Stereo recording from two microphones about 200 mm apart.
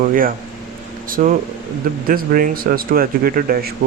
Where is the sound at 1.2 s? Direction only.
40° right (ahead or behind).